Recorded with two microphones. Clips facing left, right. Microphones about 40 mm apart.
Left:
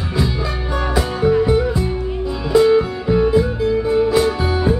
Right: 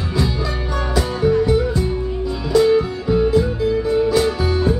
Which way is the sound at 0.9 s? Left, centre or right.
Centre.